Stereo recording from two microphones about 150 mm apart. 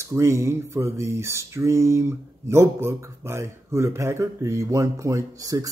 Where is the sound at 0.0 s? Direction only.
20° right (ahead or behind).